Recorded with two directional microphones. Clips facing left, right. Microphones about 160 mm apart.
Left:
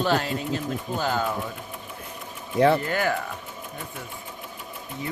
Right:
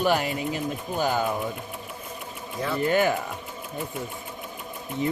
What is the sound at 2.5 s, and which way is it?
Speech, 70° left (ahead or behind).